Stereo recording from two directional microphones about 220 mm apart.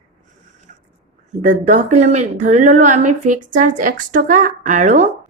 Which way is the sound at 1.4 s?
35° right (ahead or behind).